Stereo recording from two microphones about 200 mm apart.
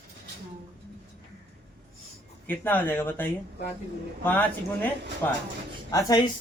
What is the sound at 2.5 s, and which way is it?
Speech, 10° left (ahead or behind).